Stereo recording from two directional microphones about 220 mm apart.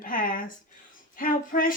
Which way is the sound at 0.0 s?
40° left (ahead or behind).